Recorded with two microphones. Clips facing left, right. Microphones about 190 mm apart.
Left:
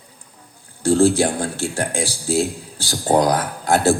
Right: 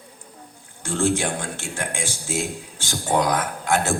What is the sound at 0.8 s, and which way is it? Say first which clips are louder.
Speech: left 8 dB; 35° left (ahead or behind).